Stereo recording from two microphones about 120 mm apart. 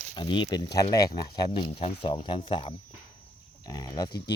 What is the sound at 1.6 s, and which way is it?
Speech, 50° left (ahead or behind).